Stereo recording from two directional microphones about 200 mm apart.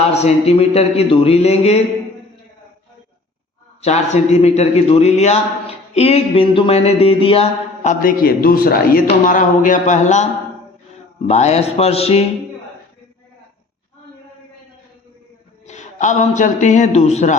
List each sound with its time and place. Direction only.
0.1 s a man's voice: 30° left (ahead or behind)
3.8 s a man's voice: 35° left (ahead or behind)
11.3 s a man's voice: 35° left (ahead or behind)
15.6 s a man's voice: 35° left (ahead or behind)